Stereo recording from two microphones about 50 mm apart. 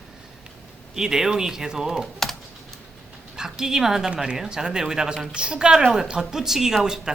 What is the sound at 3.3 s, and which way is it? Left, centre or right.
A woman's voice, centre.